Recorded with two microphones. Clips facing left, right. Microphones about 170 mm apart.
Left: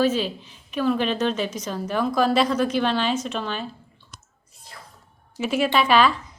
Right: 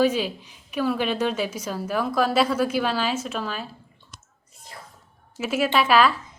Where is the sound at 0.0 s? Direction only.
10° right (ahead or behind).